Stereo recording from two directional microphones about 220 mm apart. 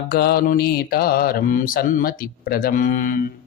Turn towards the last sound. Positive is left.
turn(degrees=35)  # may be behind; listen again after turning